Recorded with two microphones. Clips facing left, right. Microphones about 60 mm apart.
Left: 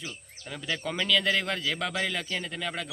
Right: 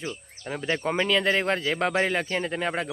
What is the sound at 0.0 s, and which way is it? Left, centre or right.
Speech, right.